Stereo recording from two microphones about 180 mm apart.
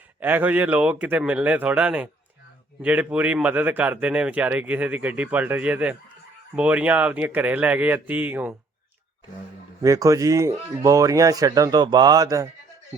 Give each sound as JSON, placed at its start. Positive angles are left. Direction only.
{"t": 0.2, "sound": "speech", "side_deg": -10}
{"t": 9.8, "sound": "speech", "side_deg": -20}